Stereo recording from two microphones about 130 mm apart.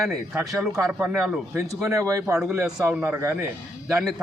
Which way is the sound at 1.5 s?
25° right (ahead or behind).